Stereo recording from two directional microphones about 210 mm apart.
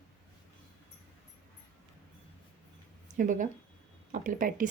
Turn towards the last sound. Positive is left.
turn(degrees=-40)  # may be behind; listen again after turning